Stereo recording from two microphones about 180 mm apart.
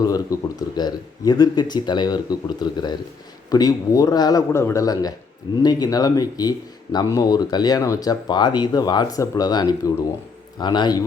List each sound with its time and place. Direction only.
0.0 s speech: 20° left (ahead or behind)